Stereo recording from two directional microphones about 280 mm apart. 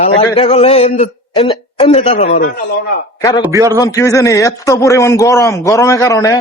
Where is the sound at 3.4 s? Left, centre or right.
Centre.